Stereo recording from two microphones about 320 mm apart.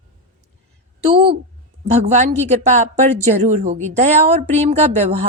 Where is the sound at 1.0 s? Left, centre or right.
Centre.